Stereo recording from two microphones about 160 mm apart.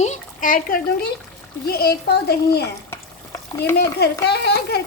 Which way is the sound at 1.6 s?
75° left (ahead or behind).